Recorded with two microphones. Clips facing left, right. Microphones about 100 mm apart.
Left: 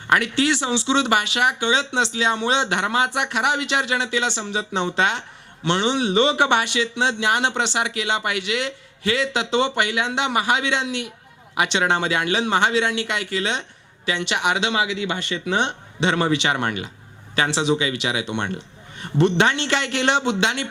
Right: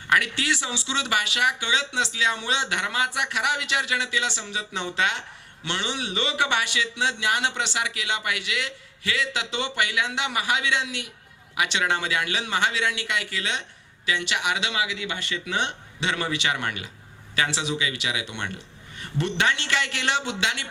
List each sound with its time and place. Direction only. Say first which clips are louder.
0.1 s a man's voice: left 5 dB; 25° left (ahead or behind)